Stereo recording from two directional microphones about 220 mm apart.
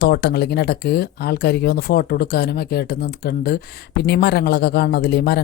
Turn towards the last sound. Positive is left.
turn(degrees=45)  # may be behind; listen again after turning